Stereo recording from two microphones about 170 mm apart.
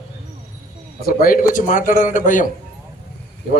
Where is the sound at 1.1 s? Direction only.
55° left (ahead or behind).